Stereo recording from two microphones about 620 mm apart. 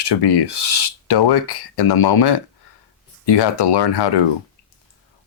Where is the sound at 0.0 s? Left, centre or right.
Left.